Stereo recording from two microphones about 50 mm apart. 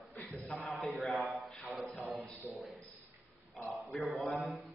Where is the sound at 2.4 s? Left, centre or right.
Right.